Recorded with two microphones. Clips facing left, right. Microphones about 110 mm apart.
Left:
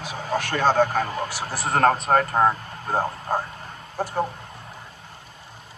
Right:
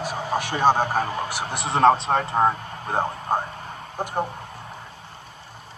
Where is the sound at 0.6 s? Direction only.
55° right (ahead or behind).